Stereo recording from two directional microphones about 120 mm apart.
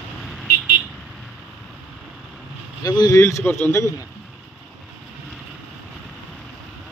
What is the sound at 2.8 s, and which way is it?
Speech, 35° left (ahead or behind).